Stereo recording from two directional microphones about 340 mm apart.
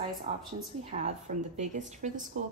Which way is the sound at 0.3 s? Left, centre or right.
Centre.